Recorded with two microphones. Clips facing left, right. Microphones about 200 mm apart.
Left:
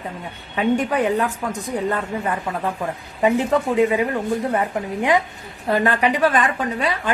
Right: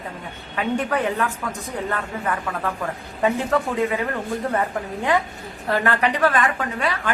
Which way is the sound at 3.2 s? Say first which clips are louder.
Left 3 dB; 15° left (ahead or behind).